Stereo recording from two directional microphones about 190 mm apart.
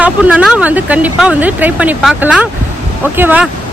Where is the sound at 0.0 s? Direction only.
5° right (ahead or behind).